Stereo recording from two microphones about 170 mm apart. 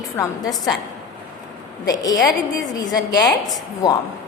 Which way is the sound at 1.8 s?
20° left (ahead or behind).